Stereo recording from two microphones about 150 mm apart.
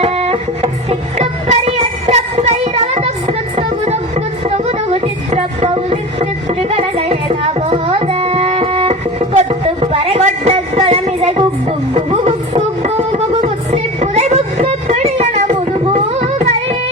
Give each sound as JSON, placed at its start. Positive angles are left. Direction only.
{"t": 0.0, "sound": "music", "side_deg": -40}
{"t": 4.4, "sound": "a sound", "side_deg": -45}
{"t": 13.1, "sound": "music", "side_deg": -45}
{"t": 15.9, "sound": "carnatic music", "side_deg": -45}